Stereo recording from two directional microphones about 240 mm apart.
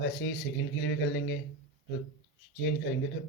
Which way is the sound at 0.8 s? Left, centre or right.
Left.